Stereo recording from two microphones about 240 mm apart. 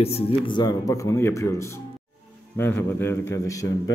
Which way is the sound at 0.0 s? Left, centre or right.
Left.